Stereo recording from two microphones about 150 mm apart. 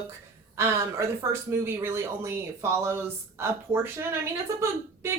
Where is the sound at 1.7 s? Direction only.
15° right (ahead or behind).